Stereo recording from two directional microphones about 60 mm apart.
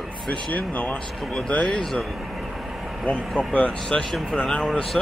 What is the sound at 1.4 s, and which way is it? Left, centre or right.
Vehicle, centre.